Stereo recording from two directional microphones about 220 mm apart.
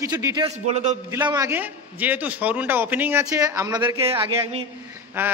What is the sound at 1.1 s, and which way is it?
A man's voice, 15° right (ahead or behind).